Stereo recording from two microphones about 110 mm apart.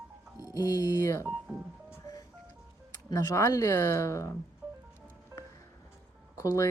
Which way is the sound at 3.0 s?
30° left (ahead or behind).